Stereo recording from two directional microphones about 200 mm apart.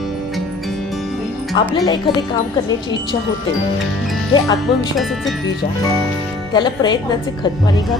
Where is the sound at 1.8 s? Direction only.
20° left (ahead or behind).